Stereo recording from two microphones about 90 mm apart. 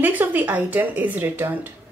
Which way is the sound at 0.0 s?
20° right (ahead or behind).